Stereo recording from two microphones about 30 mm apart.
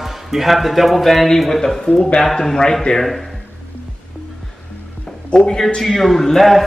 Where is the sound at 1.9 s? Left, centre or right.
Left.